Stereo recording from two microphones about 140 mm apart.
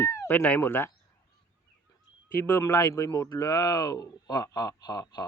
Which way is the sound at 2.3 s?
15° left (ahead or behind).